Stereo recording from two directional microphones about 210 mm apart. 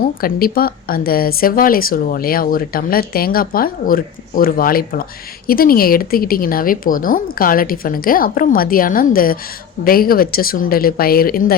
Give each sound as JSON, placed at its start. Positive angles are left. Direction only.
{"t": 0.0, "sound": "speech", "side_deg": 45}